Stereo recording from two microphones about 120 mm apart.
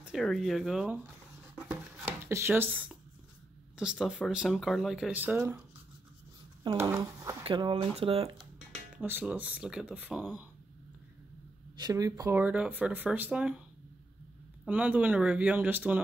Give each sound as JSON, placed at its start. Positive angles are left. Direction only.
{"t": 0.0, "sound": "speech", "side_deg": 0}
{"t": 2.2, "sound": "speech", "side_deg": -20}
{"t": 5.1, "sound": "speech", "side_deg": -15}
{"t": 6.8, "sound": "speech", "side_deg": -20}
{"t": 7.4, "sound": "speech", "side_deg": -45}
{"t": 8.4, "sound": "music", "side_deg": -5}
{"t": 9.2, "sound": "speech", "side_deg": -10}
{"t": 11.7, "sound": "speech", "side_deg": -35}
{"t": 12.4, "sound": "speech", "side_deg": -10}
{"t": 14.7, "sound": "speech", "side_deg": -10}